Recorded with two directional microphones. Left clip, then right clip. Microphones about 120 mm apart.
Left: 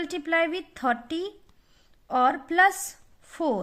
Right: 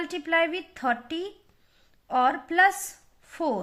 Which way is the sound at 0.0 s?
40° left (ahead or behind).